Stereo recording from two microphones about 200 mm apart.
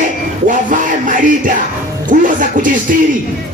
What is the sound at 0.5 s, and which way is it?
Music, 40° right (ahead or behind).